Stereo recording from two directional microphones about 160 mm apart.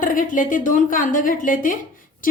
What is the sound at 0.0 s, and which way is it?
A woman's voice, 55° left (ahead or behind).